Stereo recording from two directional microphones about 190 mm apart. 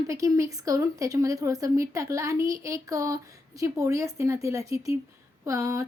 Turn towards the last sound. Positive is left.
turn(degrees=-15)  # may be behind; listen again after turning